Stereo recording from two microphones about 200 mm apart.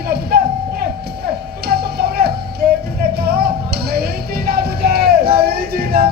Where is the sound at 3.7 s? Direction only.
50° right (ahead or behind).